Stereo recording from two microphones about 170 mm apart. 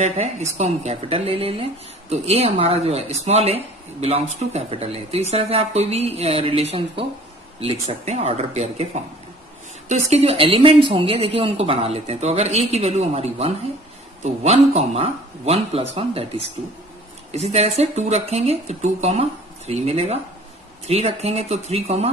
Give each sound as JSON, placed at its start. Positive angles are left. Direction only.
{"t": 0.0, "sound": "a woman's voice", "side_deg": -45}